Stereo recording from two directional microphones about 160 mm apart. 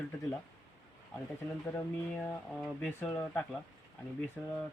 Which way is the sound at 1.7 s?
15° left (ahead or behind).